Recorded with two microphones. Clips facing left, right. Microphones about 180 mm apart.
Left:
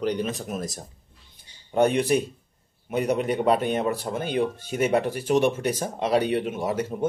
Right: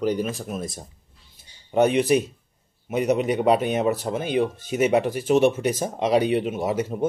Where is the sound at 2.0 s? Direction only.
10° right (ahead or behind).